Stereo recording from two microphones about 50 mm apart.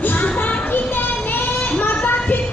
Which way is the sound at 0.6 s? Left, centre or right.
Left.